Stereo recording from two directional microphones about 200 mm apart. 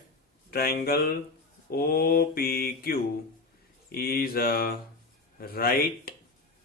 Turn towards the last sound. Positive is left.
turn(degrees=50)  # may be behind; listen again after turning